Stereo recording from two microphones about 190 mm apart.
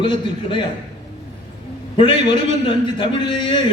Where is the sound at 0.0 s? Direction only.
25° left (ahead or behind).